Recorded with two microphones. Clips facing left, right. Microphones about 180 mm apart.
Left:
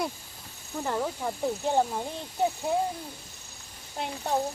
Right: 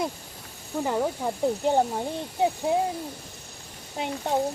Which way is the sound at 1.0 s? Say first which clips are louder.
Right 4 dB; 20° right (ahead or behind).